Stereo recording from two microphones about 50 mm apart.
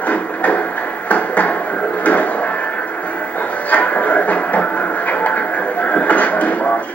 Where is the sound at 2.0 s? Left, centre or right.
Left.